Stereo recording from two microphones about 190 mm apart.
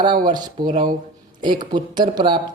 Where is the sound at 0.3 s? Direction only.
20° right (ahead or behind).